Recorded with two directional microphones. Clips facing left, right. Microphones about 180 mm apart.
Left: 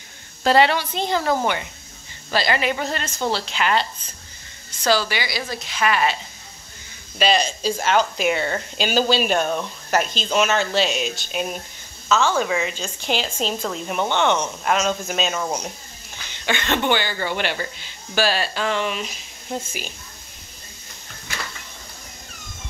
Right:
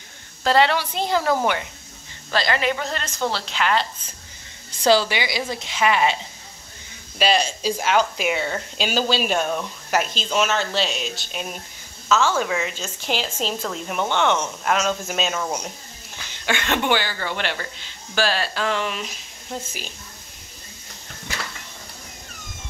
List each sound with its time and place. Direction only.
0.4 s a woman's voice: 10° left (ahead or behind)
0.7 s speech: 5° right (ahead or behind)
4.8 s a woman's voice: 25° right (ahead or behind)
7.2 s speech: 5° right (ahead or behind)
12.4 s speech: centre (ahead or behind)
16.4 s speech: 5° right (ahead or behind)
17.2 s speech: 5° left (ahead or behind)